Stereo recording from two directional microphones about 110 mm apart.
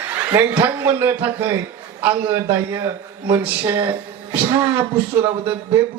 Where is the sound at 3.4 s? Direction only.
15° right (ahead or behind).